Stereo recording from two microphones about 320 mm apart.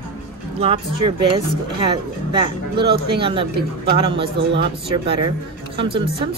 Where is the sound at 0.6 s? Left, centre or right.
Centre.